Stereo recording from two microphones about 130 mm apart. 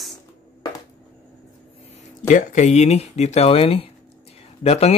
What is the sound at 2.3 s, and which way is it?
Speech, 70° left (ahead or behind).